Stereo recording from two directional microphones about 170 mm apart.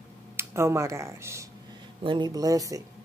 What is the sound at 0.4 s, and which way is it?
A woman's voice, 15° right (ahead or behind).